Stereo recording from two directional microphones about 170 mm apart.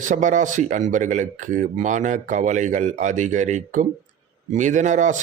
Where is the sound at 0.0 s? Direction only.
50° right (ahead or behind).